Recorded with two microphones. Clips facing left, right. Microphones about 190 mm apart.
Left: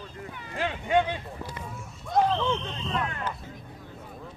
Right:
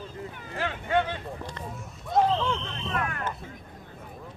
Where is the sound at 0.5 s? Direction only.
15° left (ahead or behind).